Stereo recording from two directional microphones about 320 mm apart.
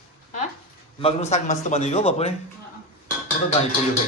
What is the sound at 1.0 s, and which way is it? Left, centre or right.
A man's voice, left.